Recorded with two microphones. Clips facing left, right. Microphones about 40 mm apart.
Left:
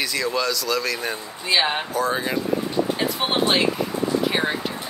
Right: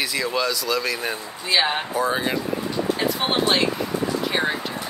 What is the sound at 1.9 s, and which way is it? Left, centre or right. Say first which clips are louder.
Speech: right 1 dB; centre.